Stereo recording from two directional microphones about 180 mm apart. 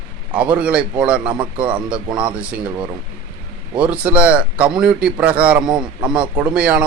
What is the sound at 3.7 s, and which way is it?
A man's voice, 5° right (ahead or behind).